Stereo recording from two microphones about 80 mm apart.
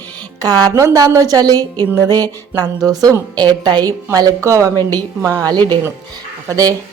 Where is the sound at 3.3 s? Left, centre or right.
Right.